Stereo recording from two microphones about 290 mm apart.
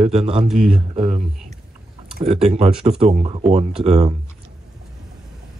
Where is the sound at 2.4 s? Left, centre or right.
Right.